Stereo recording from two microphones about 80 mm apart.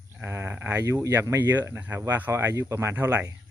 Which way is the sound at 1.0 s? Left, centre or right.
Right.